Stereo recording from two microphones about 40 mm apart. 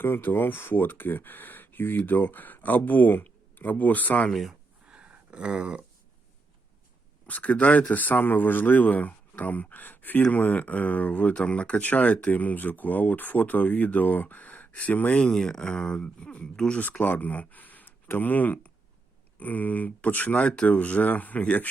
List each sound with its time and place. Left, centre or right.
0.0 s speech: left
4.9 s a sound: right
7.3 s speech: left
15.2 s speech: centre
16.7 s speech: left